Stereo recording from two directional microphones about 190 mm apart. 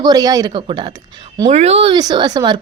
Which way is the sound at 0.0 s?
20° right (ahead or behind).